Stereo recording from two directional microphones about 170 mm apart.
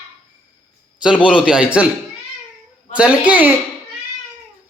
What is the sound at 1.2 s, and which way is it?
Speech, 5° right (ahead or behind).